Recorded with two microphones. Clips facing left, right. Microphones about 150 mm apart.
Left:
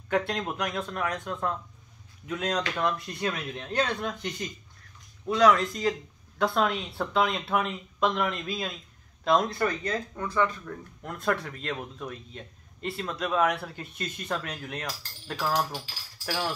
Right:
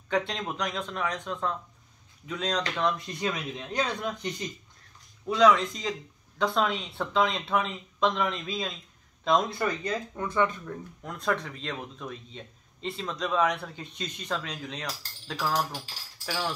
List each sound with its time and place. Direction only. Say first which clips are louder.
0.3 s speech: left 2 dB; 5° left (ahead or behind)
9.8 s speech: even; 20° right (ahead or behind)
11.0 s speech: left 1 dB; 5° left (ahead or behind)